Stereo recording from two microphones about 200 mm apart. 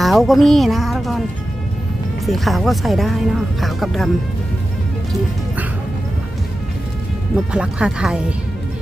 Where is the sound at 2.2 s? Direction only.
Centre (ahead or behind).